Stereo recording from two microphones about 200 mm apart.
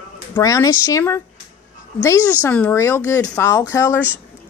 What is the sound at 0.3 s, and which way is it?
Speech, 15° left (ahead or behind).